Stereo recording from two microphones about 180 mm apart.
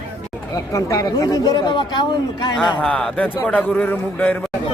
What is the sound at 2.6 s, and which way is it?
A man's voice, 5° left (ahead or behind).